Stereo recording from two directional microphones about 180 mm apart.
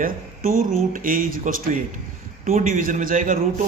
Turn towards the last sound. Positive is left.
turn(degrees=-50)  # may be behind; listen again after turning